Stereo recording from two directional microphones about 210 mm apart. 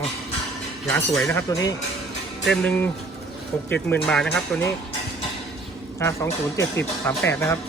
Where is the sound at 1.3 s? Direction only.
15° left (ahead or behind).